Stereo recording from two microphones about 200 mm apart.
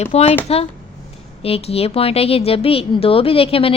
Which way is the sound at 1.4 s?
30° left (ahead or behind).